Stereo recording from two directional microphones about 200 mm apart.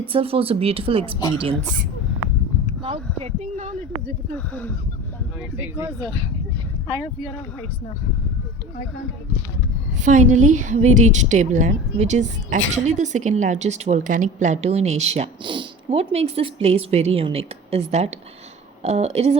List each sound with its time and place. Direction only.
0.1 s speech: 25° right (ahead or behind)
2.8 s speech: 30° right (ahead or behind)
10.0 s a woman's voice: 35° right (ahead or behind)